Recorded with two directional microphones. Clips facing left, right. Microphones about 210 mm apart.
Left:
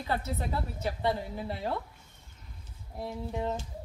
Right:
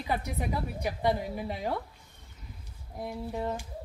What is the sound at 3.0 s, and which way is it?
Speech, 10° right (ahead or behind).